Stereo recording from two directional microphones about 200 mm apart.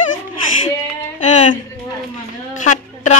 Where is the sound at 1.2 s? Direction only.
35° left (ahead or behind).